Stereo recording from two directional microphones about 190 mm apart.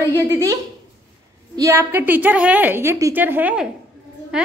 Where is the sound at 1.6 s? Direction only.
15° right (ahead or behind).